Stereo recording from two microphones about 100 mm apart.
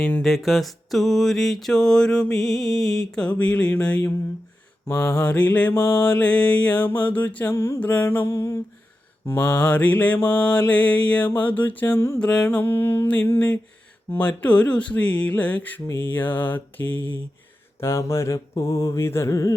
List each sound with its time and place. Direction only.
0.0 s mantra: 15° left (ahead or behind)
0.3 s a sound: centre (ahead or behind)
4.9 s mantra: 10° left (ahead or behind); by 7.8 s 25° left (ahead or behind)
7.8 s mantra: 15° left (ahead or behind)
9.4 s mantra: 15° left (ahead or behind)
12.2 s mantra: 10° left (ahead or behind)
17.7 s mantra: 25° left (ahead or behind)